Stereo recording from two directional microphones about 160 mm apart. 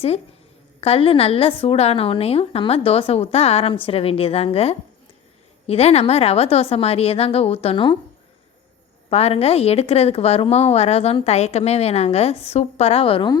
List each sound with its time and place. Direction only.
0.8 s a woman's voice: 35° left (ahead or behind)
9.0 s a woman's voice: 40° left (ahead or behind)